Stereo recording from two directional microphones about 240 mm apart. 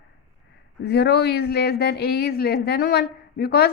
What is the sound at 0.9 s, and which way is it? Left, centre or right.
Speech, left.